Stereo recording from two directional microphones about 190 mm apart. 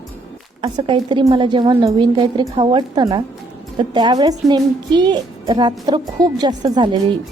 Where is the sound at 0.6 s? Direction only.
25° right (ahead or behind).